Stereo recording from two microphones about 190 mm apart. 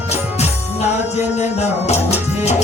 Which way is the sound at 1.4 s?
35° left (ahead or behind).